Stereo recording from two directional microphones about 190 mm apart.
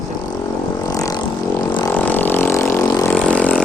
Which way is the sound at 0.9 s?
20° left (ahead or behind).